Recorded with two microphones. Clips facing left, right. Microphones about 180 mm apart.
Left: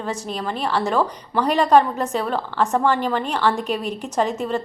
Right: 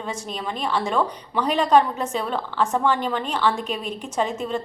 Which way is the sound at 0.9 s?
10° left (ahead or behind).